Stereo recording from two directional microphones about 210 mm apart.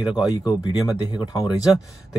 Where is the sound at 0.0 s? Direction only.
5° right (ahead or behind).